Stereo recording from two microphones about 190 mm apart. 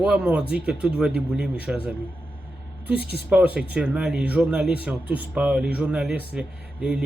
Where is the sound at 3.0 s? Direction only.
55° right (ahead or behind).